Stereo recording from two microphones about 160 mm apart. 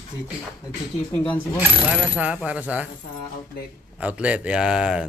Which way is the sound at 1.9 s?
10° right (ahead or behind).